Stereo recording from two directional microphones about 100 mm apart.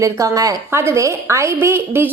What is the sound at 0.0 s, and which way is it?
A woman's voice, 35° right (ahead or behind).